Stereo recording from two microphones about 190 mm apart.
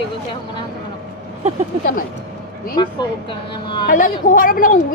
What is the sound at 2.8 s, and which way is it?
A woman's voice, 25° left (ahead or behind).